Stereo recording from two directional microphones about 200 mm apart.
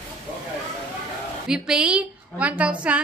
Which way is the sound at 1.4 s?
5° right (ahead or behind).